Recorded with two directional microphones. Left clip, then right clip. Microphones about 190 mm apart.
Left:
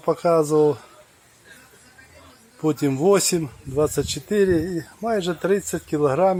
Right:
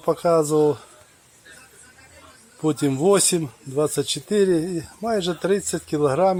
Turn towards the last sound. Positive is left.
turn(degrees=0)  # may be behind; listen again after turning